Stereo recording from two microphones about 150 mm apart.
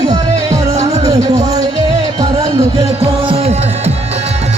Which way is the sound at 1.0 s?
25° right (ahead or behind).